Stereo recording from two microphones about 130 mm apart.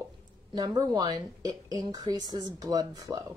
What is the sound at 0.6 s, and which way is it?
A woman's voice, 30° right (ahead or behind).